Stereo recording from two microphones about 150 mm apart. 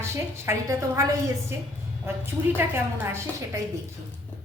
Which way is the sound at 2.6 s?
15° right (ahead or behind).